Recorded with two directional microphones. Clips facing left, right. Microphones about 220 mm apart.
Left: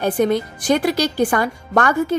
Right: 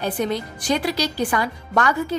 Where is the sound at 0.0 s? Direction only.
50° left (ahead or behind).